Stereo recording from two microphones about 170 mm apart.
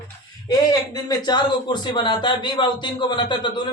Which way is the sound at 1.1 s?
25° left (ahead or behind).